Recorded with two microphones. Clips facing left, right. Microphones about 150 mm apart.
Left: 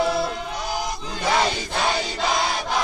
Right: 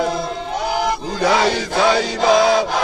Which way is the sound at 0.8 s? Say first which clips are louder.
Right 8 dB; 70° right (ahead or behind).